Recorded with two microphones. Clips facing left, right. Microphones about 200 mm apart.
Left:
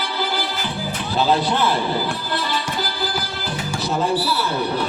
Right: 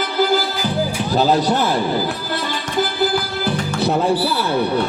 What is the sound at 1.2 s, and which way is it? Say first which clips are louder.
Speech: right 2 dB; 45° right (ahead or behind).